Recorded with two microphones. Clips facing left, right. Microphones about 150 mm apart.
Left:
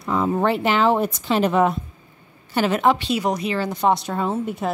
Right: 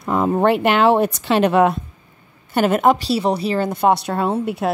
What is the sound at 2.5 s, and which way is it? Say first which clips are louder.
A woman's voice: right 3 dB; 50° right (ahead or behind).